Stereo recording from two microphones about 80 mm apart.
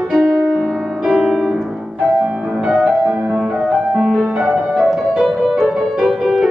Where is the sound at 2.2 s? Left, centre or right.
Centre.